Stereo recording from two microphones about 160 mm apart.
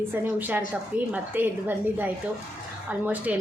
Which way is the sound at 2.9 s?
10° right (ahead or behind).